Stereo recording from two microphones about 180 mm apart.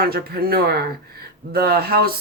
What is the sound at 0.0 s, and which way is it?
Speech, 55° right (ahead or behind).